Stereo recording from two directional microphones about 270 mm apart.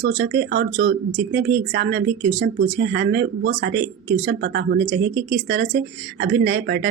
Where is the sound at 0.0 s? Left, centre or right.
Right.